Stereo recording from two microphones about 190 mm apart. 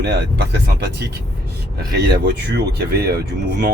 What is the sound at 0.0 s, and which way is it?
Speech, 60° right (ahead or behind).